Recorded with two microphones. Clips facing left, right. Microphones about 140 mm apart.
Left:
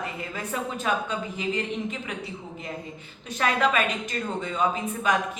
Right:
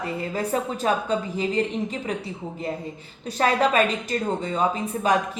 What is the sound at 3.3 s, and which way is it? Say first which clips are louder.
Speech: right 4 dB; 35° right (ahead or behind).